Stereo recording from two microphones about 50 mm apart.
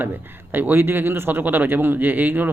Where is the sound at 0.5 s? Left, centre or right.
Right.